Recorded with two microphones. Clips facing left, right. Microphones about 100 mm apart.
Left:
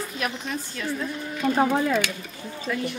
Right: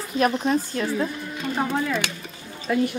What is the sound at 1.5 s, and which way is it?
Speech, 25° left (ahead or behind).